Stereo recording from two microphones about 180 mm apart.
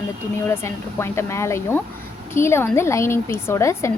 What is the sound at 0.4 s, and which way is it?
Speech, 15° left (ahead or behind).